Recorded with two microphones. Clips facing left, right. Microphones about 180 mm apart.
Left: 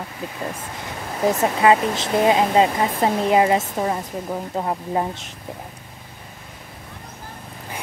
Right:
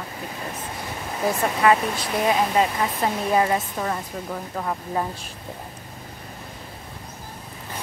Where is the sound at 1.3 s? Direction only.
25° left (ahead or behind).